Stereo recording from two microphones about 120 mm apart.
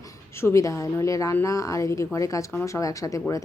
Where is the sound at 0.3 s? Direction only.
25° left (ahead or behind).